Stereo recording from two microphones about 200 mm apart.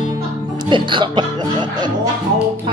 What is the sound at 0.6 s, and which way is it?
Speech, 25° right (ahead or behind).